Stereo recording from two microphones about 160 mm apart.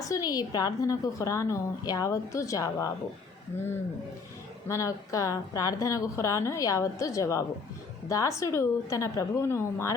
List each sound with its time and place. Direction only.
0.1 s a woman's voice: 25° left (ahead or behind)
4.7 s a woman's voice: 20° left (ahead or behind)